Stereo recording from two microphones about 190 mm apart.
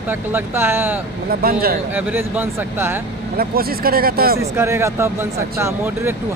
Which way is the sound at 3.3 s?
50° right (ahead or behind).